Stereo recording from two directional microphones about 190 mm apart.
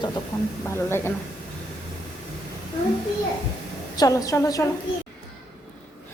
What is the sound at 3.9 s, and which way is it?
Speech, 20° left (ahead or behind).